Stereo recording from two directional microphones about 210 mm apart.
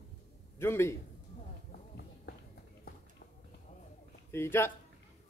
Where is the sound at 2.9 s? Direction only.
45° left (ahead or behind).